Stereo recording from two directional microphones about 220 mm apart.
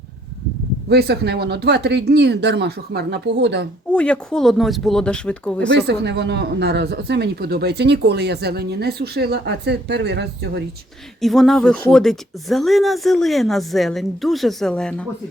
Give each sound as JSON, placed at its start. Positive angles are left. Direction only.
{"t": 0.9, "sound": "speech", "side_deg": -50}
{"t": 3.9, "sound": "speech", "side_deg": 5}
{"t": 5.8, "sound": "speech", "side_deg": -50}
{"t": 11.2, "sound": "speech", "side_deg": 0}